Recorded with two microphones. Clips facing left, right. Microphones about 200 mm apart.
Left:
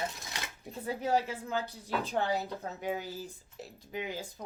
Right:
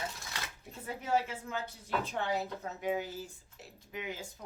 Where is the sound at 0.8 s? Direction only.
35° left (ahead or behind).